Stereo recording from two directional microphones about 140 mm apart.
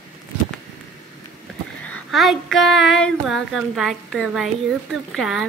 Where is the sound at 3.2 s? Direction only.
Centre (ahead or behind).